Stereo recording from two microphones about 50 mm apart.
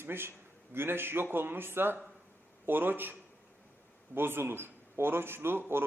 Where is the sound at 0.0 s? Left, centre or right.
Right.